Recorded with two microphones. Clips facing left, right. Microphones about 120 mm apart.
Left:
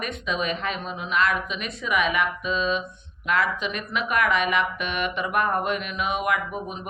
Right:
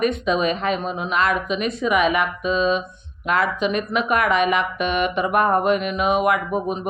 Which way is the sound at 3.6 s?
50° right (ahead or behind).